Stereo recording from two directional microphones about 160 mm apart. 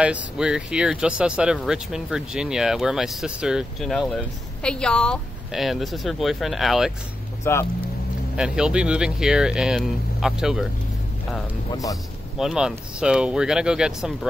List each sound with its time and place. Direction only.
0.0 s speech: 5° right (ahead or behind)
7.5 s speech: 15° left (ahead or behind)
8.4 s speech: 5° right (ahead or behind)
11.7 s a man's voice: 20° left (ahead or behind)
12.4 s speech: 5° right (ahead or behind)